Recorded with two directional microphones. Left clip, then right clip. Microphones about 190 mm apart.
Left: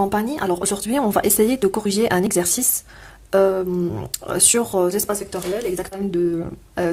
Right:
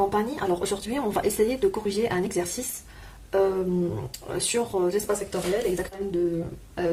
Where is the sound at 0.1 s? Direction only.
45° left (ahead or behind).